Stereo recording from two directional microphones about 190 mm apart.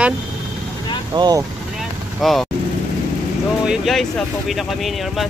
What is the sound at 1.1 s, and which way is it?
Speech, 20° right (ahead or behind).